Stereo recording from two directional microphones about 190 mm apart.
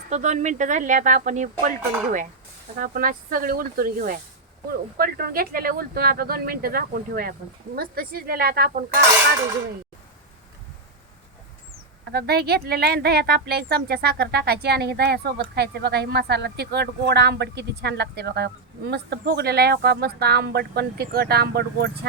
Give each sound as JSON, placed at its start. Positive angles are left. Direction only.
{"t": 0.1, "sound": "speech", "side_deg": -40}
{"t": 2.7, "sound": "speech", "side_deg": -45}
{"t": 12.1, "sound": "speech", "side_deg": -55}